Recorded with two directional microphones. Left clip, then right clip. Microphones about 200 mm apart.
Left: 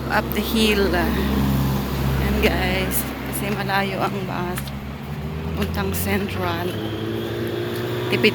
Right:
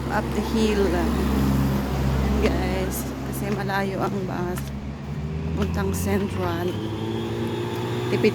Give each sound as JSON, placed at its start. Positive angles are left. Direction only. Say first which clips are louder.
{"t": 0.1, "sound": "speech", "louder": "left 4 dB", "side_deg": -5}
{"t": 2.4, "sound": "speech", "louder": "left 5 dB", "side_deg": -5}
{"t": 3.4, "sound": "a woman's voice", "louder": "left 4 dB", "side_deg": -15}
{"t": 5.7, "sound": "a woman's voice", "louder": "left 2 dB", "side_deg": -20}
{"t": 8.1, "sound": "a woman's voice", "louder": "left 3 dB", "side_deg": -10}